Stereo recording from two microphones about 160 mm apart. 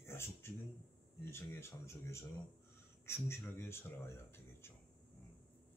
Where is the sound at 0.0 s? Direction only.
15° left (ahead or behind).